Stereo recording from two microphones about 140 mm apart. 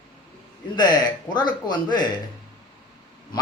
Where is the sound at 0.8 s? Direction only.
30° left (ahead or behind).